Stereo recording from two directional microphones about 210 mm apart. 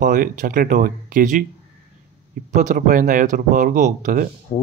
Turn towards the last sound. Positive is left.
turn(degrees=30)  # may be behind; listen again after turning